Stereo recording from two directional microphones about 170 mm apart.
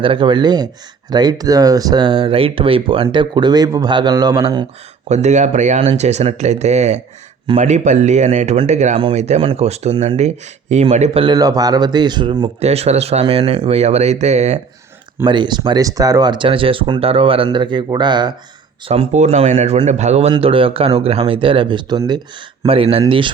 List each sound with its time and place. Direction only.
0.0 s speech: 30° right (ahead or behind)
5.0 s speech: 40° right (ahead or behind); by 12.5 s 25° right (ahead or behind)
12.5 s speech: 40° right (ahead or behind)
15.3 s speech: 25° right (ahead or behind)
18.9 s speech: 40° right (ahead or behind)